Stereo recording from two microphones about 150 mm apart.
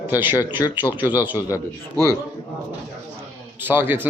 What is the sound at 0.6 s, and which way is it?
Speech, 20° left (ahead or behind).